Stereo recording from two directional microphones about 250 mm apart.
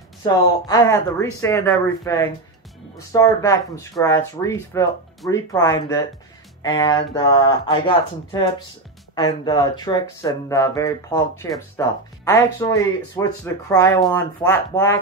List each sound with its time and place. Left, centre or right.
0.2 s speech: centre